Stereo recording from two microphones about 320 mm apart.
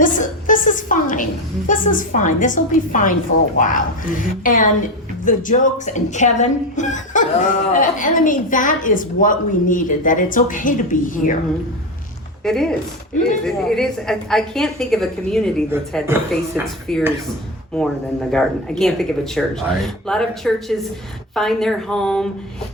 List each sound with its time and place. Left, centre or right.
0.0 s a woman's voice: left
12.5 s a woman's voice: centre
18.3 s a woman's voice: centre